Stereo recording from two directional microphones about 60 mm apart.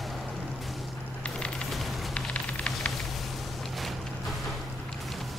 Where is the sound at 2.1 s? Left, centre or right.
Centre.